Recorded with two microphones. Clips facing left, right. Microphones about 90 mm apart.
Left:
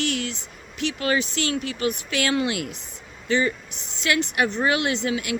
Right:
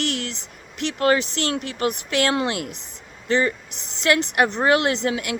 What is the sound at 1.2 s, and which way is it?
A woman's voice, 65° right (ahead or behind).